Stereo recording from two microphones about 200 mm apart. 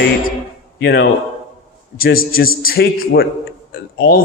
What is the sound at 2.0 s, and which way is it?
Speech, 45° left (ahead or behind).